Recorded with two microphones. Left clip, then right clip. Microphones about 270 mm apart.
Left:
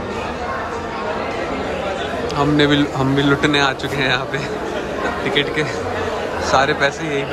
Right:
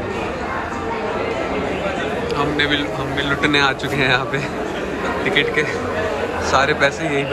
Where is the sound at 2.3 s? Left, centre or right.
Centre.